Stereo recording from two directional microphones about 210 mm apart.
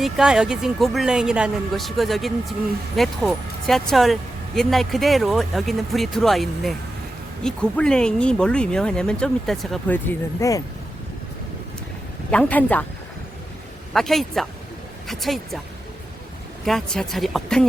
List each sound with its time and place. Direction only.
0.0 s speech: 5° right (ahead or behind); by 10.6 s 10° left (ahead or behind)
12.3 s speech: 5° left (ahead or behind)
13.9 s speech: centre (ahead or behind)
16.6 s speech: centre (ahead or behind)